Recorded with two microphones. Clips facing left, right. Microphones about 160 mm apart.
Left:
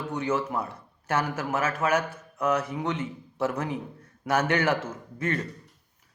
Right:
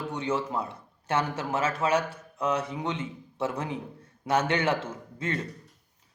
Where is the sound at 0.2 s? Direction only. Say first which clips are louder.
Left 2 dB; 30° right (ahead or behind).